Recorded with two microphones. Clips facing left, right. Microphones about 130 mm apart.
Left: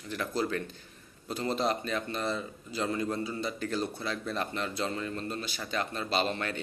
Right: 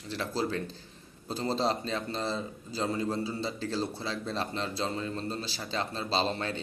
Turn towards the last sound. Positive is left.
turn(degrees=-30)  # may be behind; listen again after turning